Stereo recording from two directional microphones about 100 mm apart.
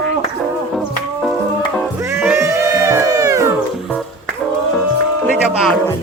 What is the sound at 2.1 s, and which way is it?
Cat, 25° right (ahead or behind).